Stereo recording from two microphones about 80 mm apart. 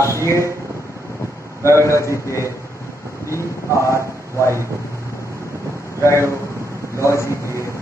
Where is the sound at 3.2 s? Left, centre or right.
Left.